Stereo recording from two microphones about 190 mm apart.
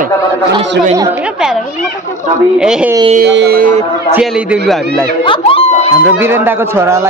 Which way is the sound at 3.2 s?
60° right (ahead or behind).